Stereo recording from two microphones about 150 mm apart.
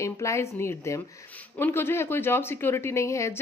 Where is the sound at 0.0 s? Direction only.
20° left (ahead or behind).